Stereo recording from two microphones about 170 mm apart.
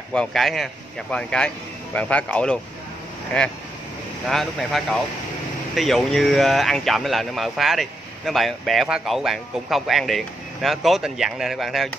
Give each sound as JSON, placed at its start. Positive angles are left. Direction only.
{"t": 0.1, "sound": "speech", "side_deg": 5}